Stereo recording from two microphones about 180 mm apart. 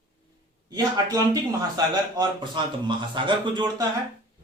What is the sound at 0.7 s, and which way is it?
Speech, 20° right (ahead or behind).